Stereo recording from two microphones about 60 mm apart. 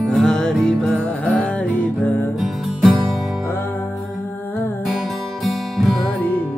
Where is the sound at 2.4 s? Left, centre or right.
Centre.